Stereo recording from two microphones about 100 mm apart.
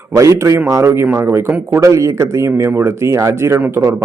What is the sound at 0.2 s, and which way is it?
Speech, 30° right (ahead or behind).